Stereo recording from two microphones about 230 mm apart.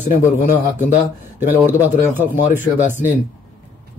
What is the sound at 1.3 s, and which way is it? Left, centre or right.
Speech, centre.